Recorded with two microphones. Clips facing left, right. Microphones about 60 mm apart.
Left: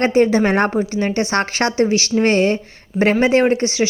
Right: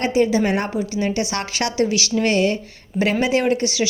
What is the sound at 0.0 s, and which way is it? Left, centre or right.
A woman's voice, left.